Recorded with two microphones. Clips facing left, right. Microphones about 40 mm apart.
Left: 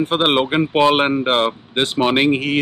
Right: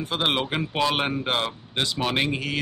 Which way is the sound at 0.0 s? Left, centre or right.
Left.